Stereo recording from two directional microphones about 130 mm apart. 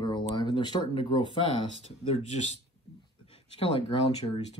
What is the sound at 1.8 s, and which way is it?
Speech, 55° left (ahead or behind).